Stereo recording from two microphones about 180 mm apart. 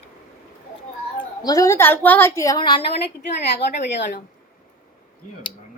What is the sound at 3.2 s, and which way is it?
Speech, 70° left (ahead or behind).